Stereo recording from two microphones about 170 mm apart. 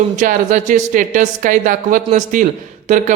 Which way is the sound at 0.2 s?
50° right (ahead or behind).